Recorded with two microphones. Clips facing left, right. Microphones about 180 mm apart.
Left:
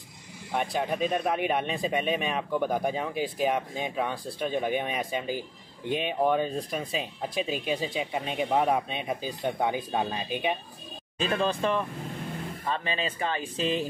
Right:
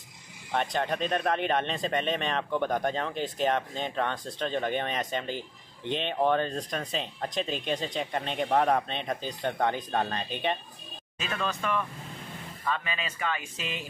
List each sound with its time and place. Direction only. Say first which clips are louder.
0.5 s speech: even; 10° left (ahead or behind)
11.1 s speech: left 6 dB; 30° left (ahead or behind)